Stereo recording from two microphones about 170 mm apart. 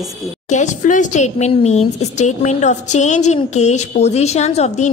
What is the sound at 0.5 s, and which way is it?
A woman's voice, 45° left (ahead or behind).